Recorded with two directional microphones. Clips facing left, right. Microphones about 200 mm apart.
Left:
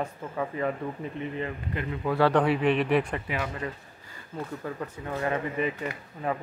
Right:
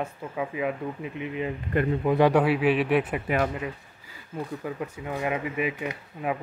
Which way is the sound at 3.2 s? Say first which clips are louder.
Right 7 dB; 50° right (ahead or behind).